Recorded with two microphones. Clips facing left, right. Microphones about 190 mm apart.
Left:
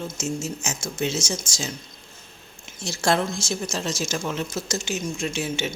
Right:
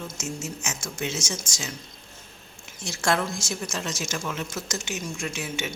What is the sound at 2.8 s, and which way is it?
A woman's voice, 30° left (ahead or behind).